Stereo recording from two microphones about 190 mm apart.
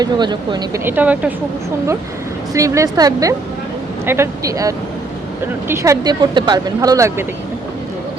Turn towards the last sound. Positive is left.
turn(degrees=-15)  # may be behind; listen again after turning